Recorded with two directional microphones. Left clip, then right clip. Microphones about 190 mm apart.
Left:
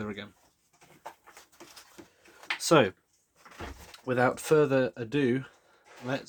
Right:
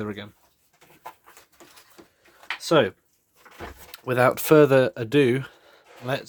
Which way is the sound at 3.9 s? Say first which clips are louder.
Right 6 dB; 50° right (ahead or behind).